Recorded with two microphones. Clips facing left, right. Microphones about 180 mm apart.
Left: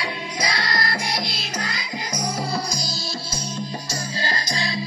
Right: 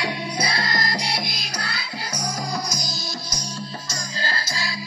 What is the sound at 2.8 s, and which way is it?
Music, 20° right (ahead or behind).